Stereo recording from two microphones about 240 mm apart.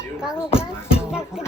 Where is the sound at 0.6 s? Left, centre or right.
Centre.